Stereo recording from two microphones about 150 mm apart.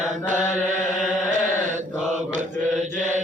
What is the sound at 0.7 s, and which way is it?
Mantra, 55° right (ahead or behind).